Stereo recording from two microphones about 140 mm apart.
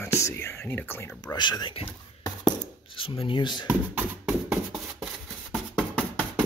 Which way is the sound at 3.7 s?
10° right (ahead or behind).